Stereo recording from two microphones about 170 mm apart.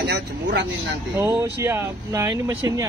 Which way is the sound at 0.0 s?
80° right.